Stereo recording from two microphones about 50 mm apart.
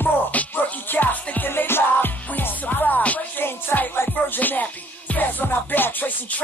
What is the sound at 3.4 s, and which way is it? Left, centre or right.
Music, left.